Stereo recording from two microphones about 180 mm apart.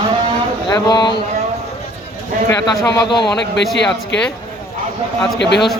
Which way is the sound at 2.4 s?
15° left (ahead or behind).